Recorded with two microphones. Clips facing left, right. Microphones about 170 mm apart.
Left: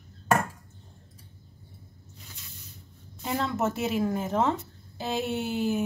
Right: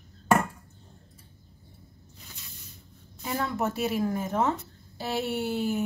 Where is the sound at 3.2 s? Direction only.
20° left (ahead or behind).